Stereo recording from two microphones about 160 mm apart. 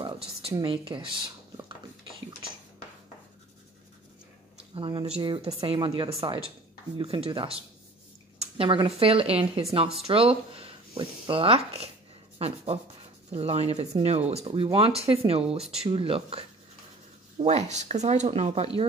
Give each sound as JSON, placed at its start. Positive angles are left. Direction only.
{"t": 0.0, "sound": "a sound", "side_deg": -35}
{"t": 0.6, "sound": "speech", "side_deg": -30}
{"t": 4.7, "sound": "speech", "side_deg": -30}
{"t": 17.5, "sound": "speech", "side_deg": -45}